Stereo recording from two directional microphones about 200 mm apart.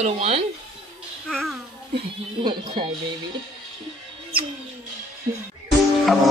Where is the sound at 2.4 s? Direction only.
25° right (ahead or behind).